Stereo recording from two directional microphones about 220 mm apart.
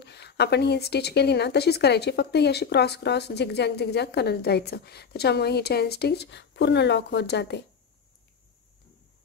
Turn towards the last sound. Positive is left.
turn(degrees=50)  # may be behind; listen again after turning